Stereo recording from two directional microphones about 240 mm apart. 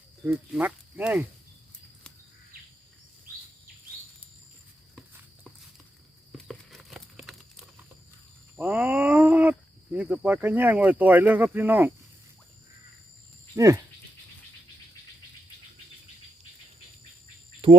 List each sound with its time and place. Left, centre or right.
0.3 s speech: centre
6.3 s horse: centre
8.5 s speech: centre
13.6 s speech: centre
17.6 s cricket: right